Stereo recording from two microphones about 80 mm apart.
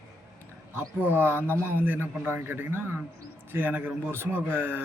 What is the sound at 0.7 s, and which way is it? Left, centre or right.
A man's voice, right.